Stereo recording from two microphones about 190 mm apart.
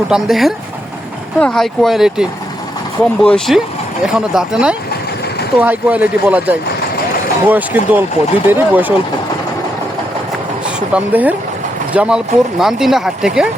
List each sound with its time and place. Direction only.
0.1 s speech: centre (ahead or behind)
3.2 s speech: centre (ahead or behind)
10.8 s speech: 5° right (ahead or behind)